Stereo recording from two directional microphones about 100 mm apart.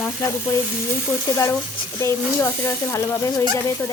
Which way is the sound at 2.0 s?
25° left (ahead or behind).